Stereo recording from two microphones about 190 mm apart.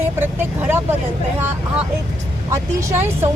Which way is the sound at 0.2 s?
10° right (ahead or behind).